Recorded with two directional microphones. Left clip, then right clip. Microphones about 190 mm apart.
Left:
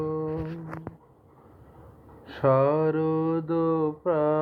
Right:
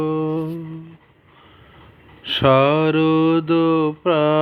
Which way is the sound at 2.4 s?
35° right (ahead or behind).